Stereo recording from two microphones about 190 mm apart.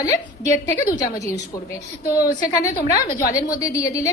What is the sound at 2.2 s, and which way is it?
A woman's voice, 20° left (ahead or behind).